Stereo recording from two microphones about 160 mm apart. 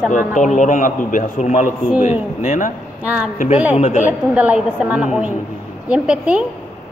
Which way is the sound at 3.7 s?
50° left (ahead or behind).